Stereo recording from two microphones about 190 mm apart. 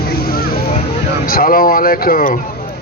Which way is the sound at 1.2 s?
50° left (ahead or behind).